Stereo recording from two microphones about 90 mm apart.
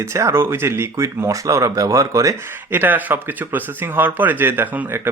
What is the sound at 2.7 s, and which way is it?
Speech, 20° right (ahead or behind).